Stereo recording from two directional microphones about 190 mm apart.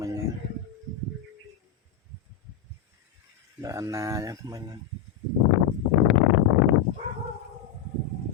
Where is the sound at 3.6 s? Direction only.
15° right (ahead or behind).